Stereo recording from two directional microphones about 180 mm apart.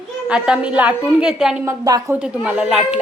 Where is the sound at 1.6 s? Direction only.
20° right (ahead or behind).